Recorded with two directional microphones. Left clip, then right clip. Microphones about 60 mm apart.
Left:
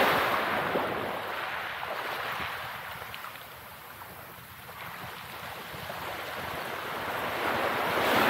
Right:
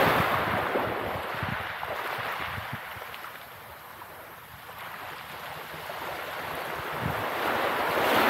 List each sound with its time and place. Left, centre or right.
0.0 s a sound: centre
6.1 s waves: centre
7.4 s waves: right
8.0 s waves: centre